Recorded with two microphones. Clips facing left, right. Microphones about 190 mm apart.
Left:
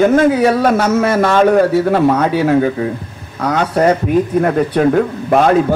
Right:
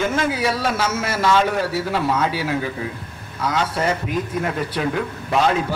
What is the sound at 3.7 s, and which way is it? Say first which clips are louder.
Speech: left 10 dB; 40° left (ahead or behind).